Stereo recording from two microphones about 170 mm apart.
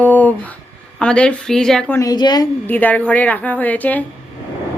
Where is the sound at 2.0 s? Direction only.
25° left (ahead or behind).